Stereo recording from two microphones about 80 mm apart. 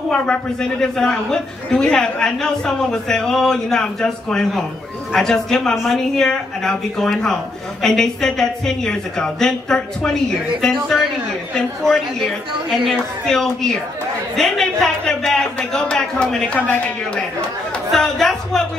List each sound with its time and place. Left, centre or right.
0.1 s a man's voice: centre
12.6 s speech: centre
13.3 s a man's voice: centre
16.5 s a man's voice: left
17.9 s speech: centre